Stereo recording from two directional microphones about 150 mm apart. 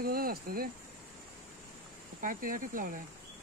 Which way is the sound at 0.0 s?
85° right.